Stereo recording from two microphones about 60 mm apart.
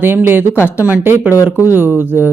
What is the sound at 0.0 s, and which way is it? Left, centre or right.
Speech, right.